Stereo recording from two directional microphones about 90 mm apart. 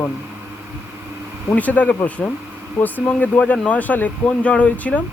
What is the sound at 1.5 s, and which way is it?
Speech, 15° left (ahead or behind).